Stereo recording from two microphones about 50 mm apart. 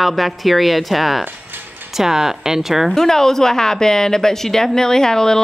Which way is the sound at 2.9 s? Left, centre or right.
Centre.